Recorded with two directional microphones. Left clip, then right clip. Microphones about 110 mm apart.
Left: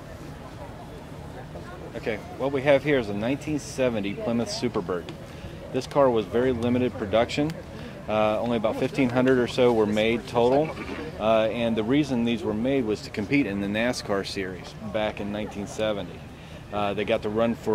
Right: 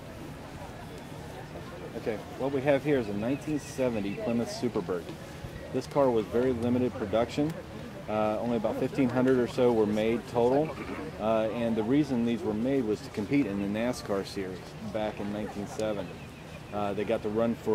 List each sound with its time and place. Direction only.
2.0 s speech: 20° left (ahead or behind)
4.7 s speech: 35° left (ahead or behind)
6.1 s speech: 25° left (ahead or behind)
9.6 s speech: 30° left (ahead or behind)